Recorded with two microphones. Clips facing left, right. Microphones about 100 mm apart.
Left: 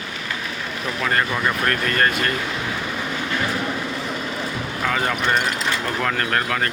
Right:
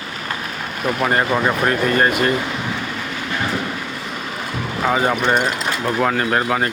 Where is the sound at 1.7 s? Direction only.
15° right (ahead or behind).